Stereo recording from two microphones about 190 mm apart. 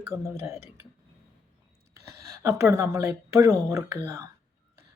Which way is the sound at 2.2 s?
15° right (ahead or behind).